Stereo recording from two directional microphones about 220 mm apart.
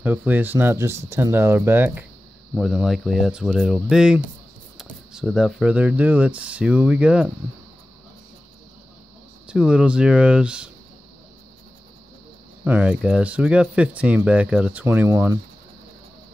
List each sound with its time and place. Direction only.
0.0 s speech: 10° right (ahead or behind)
9.5 s speech: 5° right (ahead or behind)
12.6 s speech: 5° right (ahead or behind)